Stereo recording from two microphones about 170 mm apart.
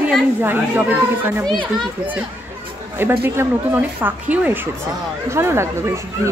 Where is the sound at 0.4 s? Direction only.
10° right (ahead or behind).